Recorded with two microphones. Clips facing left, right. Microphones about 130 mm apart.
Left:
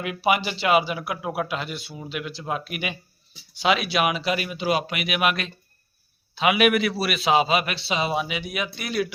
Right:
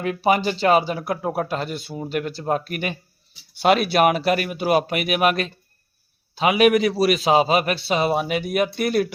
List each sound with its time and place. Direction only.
0.0 s a man's voice: 40° right (ahead or behind)